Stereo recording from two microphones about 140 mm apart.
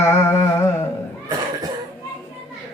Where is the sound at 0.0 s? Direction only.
20° left (ahead or behind).